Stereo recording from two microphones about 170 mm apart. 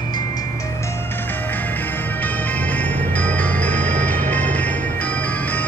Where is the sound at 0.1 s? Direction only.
20° left (ahead or behind).